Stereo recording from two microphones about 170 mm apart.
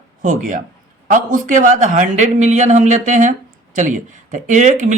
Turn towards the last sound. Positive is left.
turn(degrees=-45)  # may be behind; listen again after turning